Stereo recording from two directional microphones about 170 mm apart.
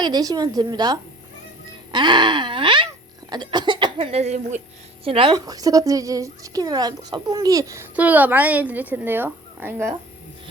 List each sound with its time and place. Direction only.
0.0 s speech: 25° right (ahead or behind)
3.9 s speech: 40° right (ahead or behind); by 9.9 s 15° right (ahead or behind)